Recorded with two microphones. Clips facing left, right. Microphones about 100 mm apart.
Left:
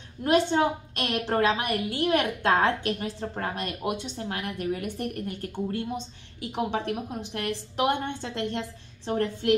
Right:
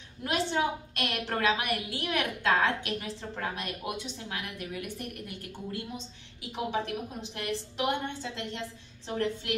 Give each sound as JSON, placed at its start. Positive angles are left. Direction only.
{"t": 0.5, "sound": "a woman's voice", "side_deg": 35}